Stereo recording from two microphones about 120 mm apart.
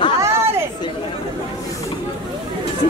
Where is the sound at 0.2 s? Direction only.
20° right (ahead or behind).